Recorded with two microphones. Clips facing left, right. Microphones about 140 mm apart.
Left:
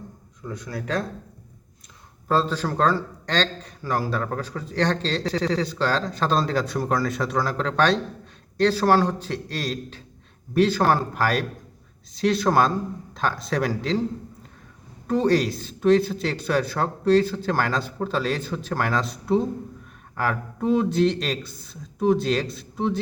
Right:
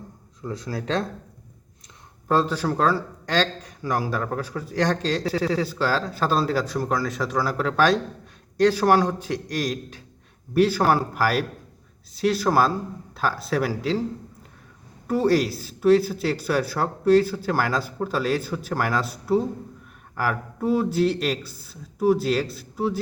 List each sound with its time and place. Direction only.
0.4 s speech: 25° right (ahead or behind)
2.2 s a man's voice: 10° right (ahead or behind)
15.0 s a man's voice: 10° right (ahead or behind)